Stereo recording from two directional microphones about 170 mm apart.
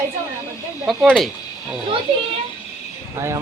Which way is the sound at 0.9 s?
Centre (ahead or behind).